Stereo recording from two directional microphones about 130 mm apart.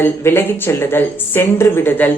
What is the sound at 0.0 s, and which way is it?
A woman's voice, 15° left (ahead or behind).